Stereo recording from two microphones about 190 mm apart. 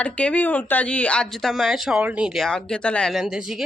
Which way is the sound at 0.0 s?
5° left (ahead or behind).